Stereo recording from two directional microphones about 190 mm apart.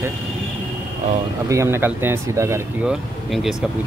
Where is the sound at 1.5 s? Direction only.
15° right (ahead or behind).